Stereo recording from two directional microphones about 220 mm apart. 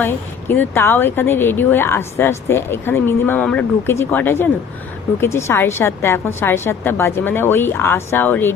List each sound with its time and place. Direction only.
0.0 s speech: 10° left (ahead or behind)